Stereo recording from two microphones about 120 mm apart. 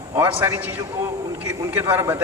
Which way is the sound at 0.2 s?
15° right (ahead or behind).